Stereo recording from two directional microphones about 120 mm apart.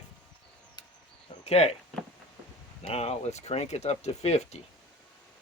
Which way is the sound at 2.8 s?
60° left (ahead or behind).